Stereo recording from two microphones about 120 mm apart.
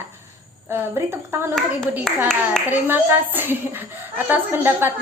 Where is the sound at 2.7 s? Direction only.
15° right (ahead or behind).